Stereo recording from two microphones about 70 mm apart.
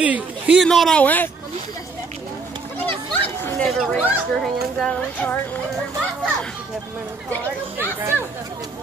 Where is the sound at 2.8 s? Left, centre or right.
Left.